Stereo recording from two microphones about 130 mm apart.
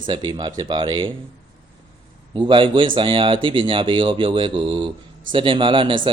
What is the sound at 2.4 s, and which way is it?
A man's voice, 40° right (ahead or behind).